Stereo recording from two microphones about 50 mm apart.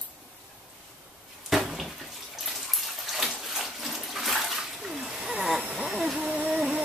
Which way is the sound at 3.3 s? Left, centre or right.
Centre.